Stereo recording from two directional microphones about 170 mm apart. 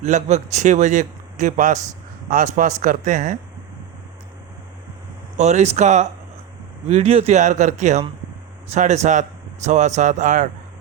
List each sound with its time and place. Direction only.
0.0 s speech: 45° right (ahead or behind)
5.4 s speech: 40° right (ahead or behind)